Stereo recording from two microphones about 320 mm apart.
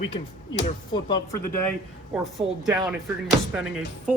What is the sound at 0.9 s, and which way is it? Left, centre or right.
Speech, centre.